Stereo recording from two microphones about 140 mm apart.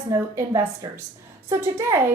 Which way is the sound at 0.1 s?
20° right (ahead or behind).